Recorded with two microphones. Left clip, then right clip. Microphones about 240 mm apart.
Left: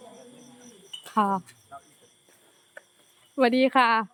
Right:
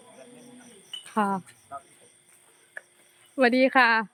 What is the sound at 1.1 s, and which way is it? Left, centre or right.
Speech, centre.